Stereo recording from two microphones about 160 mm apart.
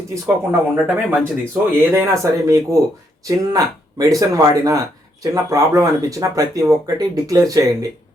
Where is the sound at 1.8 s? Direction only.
15° right (ahead or behind).